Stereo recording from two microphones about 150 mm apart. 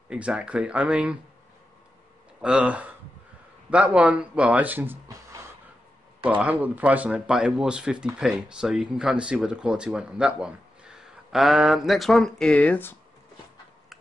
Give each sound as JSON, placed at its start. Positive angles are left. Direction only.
{"t": 0.1, "sound": "speech", "side_deg": -5}
{"t": 2.4, "sound": "speech", "side_deg": -10}
{"t": 6.4, "sound": "speech", "side_deg": -10}